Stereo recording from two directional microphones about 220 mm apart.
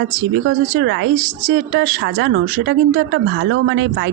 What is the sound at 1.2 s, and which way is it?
Speech, 40° right (ahead or behind).